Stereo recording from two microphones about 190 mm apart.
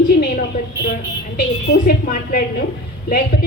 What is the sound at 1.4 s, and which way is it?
A woman's voice, 45° left (ahead or behind).